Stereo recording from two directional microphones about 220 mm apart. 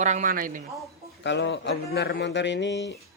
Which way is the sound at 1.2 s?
55° left (ahead or behind).